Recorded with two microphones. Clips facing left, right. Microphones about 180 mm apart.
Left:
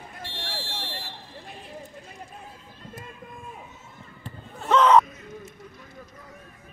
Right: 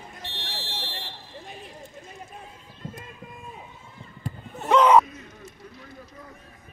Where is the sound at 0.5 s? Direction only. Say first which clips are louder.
Even; 10° left (ahead or behind).